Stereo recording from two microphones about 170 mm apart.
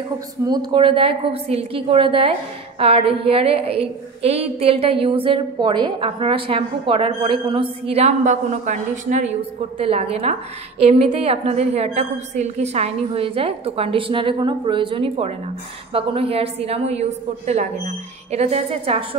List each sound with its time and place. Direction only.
0.5 s a woman's voice: 25° right (ahead or behind)